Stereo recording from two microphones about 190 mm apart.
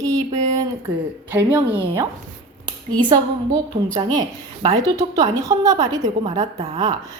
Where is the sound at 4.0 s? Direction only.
20° right (ahead or behind).